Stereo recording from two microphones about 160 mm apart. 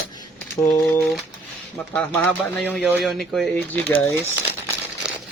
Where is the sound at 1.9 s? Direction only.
10° left (ahead or behind).